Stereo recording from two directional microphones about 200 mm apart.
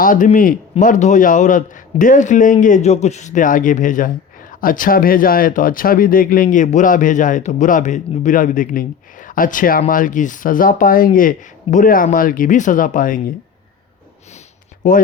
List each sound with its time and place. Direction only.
0.0 s a man's voice: 40° left (ahead or behind)
14.8 s a man's voice: 40° left (ahead or behind)